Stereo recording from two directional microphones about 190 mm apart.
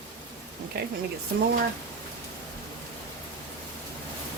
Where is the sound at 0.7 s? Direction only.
55° right (ahead or behind).